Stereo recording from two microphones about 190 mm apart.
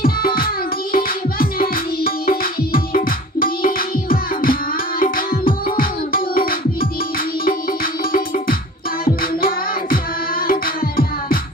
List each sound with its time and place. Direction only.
0.0 s music: 50° left (ahead or behind)
10.4 s music: 50° left (ahead or behind)